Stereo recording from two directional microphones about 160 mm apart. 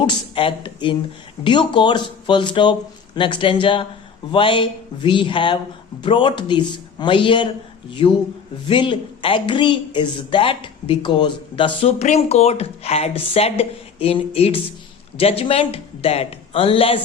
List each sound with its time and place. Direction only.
0.0 s speech: 30° left (ahead or behind)